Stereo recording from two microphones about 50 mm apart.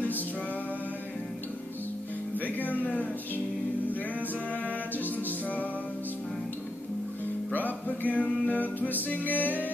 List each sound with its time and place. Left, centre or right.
2.3 s music: left
7.5 s music: left